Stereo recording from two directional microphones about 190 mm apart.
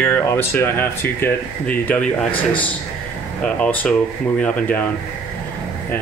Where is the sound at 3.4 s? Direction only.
5° left (ahead or behind).